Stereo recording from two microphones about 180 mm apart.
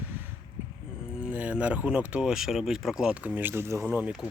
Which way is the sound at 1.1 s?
10° right (ahead or behind).